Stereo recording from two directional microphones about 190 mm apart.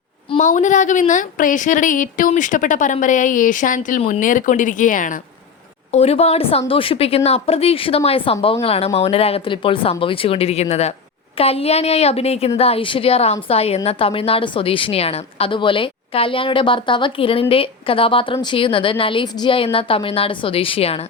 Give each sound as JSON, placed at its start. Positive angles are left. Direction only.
{"t": 0.3, "sound": "a woman's voice", "side_deg": 40}
{"t": 5.9, "sound": "a woman's voice", "side_deg": 35}